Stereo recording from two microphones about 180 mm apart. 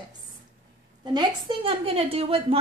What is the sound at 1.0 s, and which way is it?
A woman's voice, 25° right (ahead or behind).